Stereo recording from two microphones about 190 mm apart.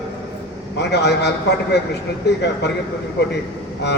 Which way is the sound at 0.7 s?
60° left (ahead or behind).